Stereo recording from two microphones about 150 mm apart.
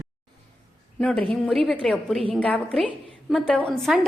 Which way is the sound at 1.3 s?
Centre (ahead or behind).